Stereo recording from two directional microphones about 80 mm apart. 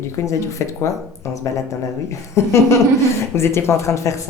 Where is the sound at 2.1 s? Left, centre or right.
Left.